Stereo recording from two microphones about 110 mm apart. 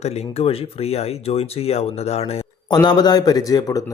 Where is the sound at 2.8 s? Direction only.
40° left (ahead or behind).